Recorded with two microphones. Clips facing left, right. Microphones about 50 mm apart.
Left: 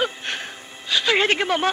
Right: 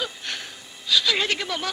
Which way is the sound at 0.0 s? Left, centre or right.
Left.